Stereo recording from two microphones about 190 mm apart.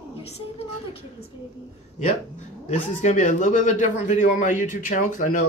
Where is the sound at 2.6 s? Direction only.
35° left (ahead or behind).